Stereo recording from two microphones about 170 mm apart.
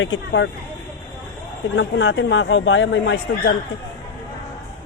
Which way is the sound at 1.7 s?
90° left.